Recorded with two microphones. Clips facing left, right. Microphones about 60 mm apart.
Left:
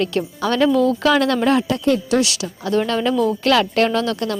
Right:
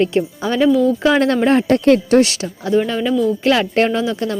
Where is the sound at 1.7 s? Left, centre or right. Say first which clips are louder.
Right 6 dB; right.